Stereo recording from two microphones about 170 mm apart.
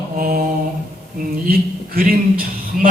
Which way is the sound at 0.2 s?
60° right (ahead or behind).